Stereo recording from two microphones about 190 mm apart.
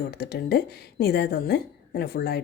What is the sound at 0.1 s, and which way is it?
A woman's voice, 55° left (ahead or behind).